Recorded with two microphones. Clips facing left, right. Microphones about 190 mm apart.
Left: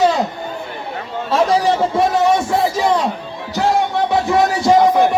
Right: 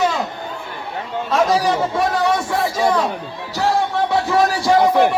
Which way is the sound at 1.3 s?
30° left (ahead or behind).